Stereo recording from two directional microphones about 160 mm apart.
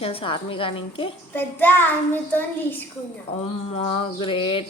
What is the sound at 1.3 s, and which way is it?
Speech, 10° left (ahead or behind).